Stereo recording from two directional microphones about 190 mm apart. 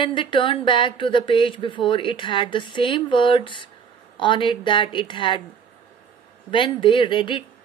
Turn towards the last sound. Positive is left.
turn(degrees=25)  # may be behind; listen again after turning